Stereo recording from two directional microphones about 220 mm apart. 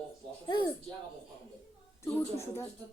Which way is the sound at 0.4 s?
20° left (ahead or behind).